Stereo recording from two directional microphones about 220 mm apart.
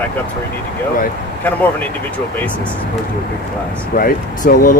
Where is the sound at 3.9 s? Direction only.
40° left (ahead or behind).